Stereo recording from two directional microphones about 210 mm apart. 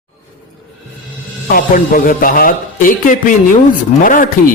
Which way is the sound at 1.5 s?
40° left (ahead or behind).